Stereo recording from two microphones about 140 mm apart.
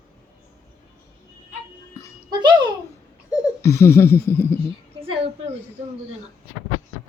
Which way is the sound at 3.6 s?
20° left (ahead or behind).